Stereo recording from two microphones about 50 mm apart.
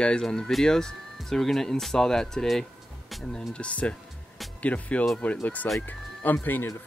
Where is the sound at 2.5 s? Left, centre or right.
Centre.